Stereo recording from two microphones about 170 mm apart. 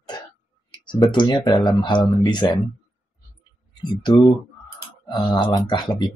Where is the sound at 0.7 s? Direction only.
25° left (ahead or behind).